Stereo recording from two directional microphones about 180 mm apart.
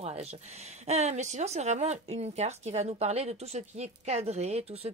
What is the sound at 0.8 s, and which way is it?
Speech, 40° right (ahead or behind).